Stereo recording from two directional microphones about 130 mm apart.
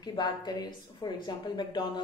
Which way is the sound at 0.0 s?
35° left (ahead or behind).